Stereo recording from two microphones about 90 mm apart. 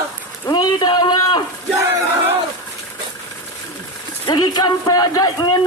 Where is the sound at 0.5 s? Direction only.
50° left (ahead or behind).